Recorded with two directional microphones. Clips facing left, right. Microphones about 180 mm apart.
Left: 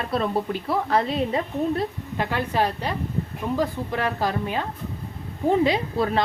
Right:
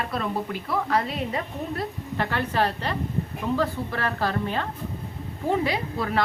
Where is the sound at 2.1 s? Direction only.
15° left (ahead or behind).